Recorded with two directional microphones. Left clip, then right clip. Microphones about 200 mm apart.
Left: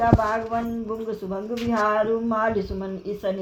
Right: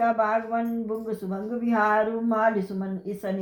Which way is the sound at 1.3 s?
35° left (ahead or behind).